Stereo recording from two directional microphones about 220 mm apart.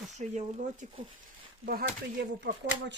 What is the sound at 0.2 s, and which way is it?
Speech, 35° right (ahead or behind).